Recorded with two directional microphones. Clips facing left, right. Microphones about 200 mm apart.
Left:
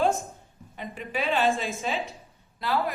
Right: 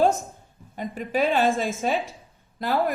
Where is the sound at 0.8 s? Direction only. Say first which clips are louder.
Right 7 dB; 45° right (ahead or behind).